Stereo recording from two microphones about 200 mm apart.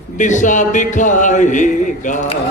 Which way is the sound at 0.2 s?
40° left (ahead or behind).